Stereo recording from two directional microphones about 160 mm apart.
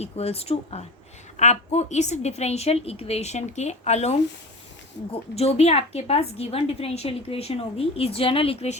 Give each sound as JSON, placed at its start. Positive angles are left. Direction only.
{"t": 0.0, "sound": "a woman's voice", "side_deg": 40}
{"t": 5.3, "sound": "a woman's voice", "side_deg": 40}